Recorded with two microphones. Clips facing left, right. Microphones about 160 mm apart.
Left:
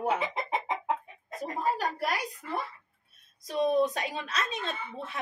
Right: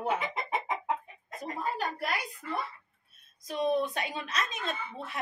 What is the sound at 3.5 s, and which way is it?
Speech, 40° left (ahead or behind).